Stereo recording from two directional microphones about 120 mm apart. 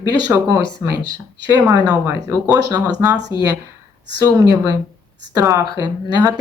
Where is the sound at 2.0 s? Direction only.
30° right (ahead or behind).